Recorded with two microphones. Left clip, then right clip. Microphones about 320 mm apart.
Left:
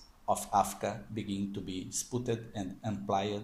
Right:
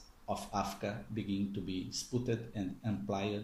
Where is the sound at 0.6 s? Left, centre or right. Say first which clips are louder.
Left 3 dB; left.